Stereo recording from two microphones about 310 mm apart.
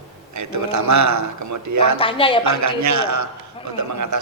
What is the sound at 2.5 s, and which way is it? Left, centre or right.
A man's voice, right.